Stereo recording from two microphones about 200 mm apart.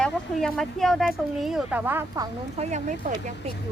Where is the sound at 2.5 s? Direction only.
35° right (ahead or behind).